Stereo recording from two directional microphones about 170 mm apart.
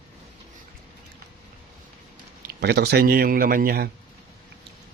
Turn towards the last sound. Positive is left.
turn(degrees=-65)  # may be behind; listen again after turning